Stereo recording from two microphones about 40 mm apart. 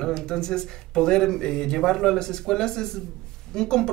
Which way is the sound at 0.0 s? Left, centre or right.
Centre.